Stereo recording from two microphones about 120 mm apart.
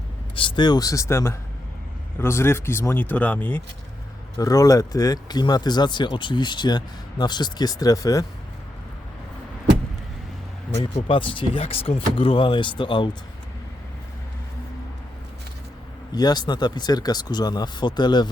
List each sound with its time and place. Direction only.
0.3 s speech: 40° left (ahead or behind); by 3.6 s 15° left (ahead or behind)
4.4 s speech: 30° left (ahead or behind)
11.1 s speech: 45° left (ahead or behind)
16.1 s speech: 35° left (ahead or behind)